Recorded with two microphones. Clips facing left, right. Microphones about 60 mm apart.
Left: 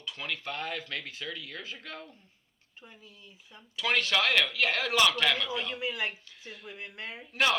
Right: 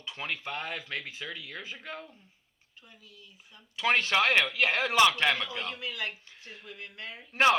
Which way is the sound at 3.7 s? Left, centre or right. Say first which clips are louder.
Right 2 dB; right.